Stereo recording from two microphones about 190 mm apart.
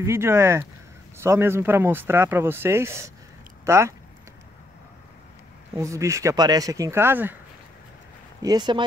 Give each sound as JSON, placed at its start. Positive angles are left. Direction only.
{"t": 0.0, "sound": "speech", "side_deg": -15}
{"t": 5.8, "sound": "speech", "side_deg": -15}
{"t": 8.4, "sound": "speech", "side_deg": -20}